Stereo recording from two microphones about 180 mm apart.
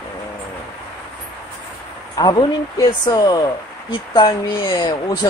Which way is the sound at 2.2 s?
20° left (ahead or behind).